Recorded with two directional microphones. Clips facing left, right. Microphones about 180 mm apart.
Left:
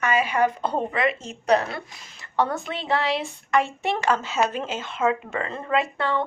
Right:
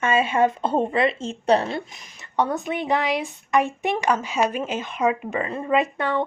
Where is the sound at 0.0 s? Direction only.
25° right (ahead or behind).